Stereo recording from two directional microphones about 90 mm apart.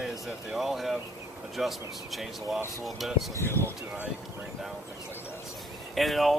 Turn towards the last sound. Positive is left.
turn(degrees=0)  # may be behind; listen again after turning